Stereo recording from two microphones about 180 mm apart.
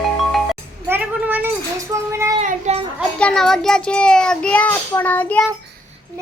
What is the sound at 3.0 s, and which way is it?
A child's voice, 5° left (ahead or behind).